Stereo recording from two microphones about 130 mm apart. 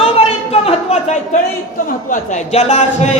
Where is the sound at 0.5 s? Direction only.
50° left (ahead or behind).